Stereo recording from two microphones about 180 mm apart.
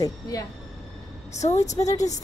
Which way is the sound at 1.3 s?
40° left (ahead or behind).